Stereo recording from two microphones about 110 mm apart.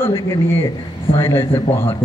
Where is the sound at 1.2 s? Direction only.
20° left (ahead or behind).